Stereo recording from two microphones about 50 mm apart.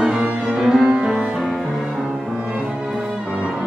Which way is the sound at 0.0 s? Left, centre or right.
Right.